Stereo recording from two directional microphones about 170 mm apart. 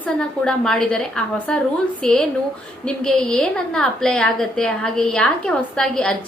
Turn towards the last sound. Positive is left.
turn(degrees=5)  # may be behind; listen again after turning